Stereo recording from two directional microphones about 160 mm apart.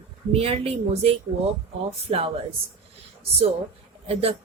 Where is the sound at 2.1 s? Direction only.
40° right (ahead or behind).